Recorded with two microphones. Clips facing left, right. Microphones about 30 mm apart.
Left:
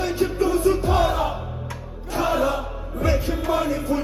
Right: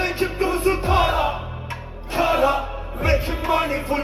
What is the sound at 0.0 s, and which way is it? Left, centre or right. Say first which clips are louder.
Music: even; right.